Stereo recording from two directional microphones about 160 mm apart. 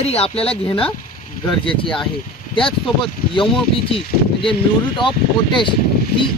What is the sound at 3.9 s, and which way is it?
Speech, 35° left (ahead or behind).